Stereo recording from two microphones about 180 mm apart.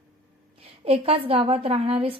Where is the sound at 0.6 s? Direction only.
35° right (ahead or behind).